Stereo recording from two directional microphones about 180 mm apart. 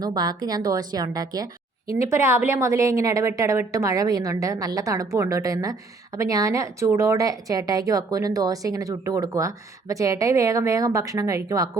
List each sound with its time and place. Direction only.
0.0 s a woman's voice: 20° right (ahead or behind)